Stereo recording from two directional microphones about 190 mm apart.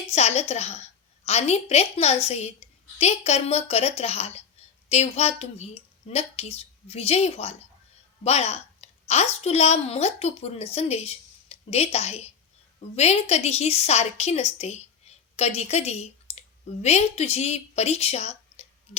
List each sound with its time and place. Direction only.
0.1 s a woman's voice: 35° left (ahead or behind)